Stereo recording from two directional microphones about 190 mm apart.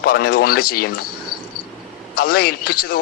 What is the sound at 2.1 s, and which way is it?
Speech, 55° left (ahead or behind).